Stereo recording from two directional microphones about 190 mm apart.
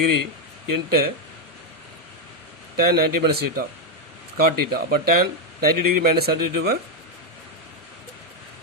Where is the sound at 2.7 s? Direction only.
55° right (ahead or behind).